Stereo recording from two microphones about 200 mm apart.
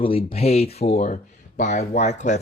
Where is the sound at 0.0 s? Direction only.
25° left (ahead or behind).